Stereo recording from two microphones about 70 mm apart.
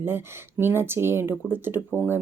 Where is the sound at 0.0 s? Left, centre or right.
Right.